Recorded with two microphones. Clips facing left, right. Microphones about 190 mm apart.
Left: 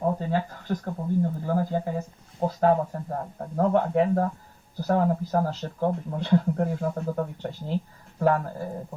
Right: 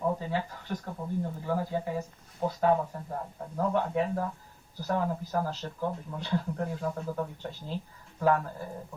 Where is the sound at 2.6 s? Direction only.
50° left (ahead or behind).